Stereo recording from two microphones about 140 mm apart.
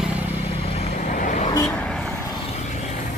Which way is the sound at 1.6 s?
5° left (ahead or behind).